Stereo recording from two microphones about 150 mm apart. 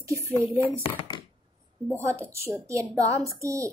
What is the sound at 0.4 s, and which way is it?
Speech, 15° right (ahead or behind).